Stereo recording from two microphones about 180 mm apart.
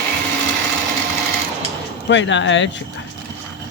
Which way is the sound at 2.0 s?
90° left.